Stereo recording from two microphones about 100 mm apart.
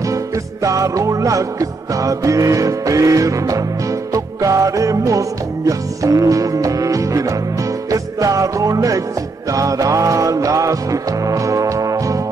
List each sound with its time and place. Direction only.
0.0 s music: 35° right (ahead or behind)